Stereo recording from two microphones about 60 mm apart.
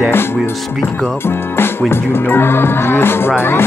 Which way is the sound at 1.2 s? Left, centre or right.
Left.